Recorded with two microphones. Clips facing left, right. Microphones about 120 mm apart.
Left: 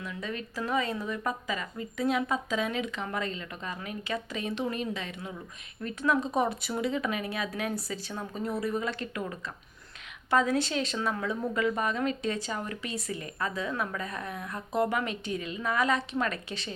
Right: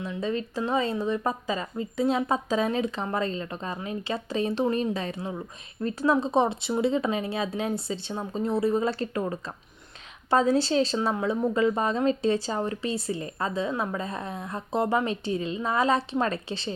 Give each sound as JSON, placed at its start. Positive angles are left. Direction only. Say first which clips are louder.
{"t": 0.0, "sound": "speech", "louder": "right 7 dB", "side_deg": -30}